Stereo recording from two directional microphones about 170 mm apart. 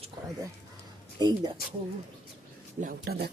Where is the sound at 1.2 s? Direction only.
25° right (ahead or behind).